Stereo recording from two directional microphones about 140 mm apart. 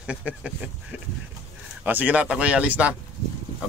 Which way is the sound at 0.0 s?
10° right (ahead or behind).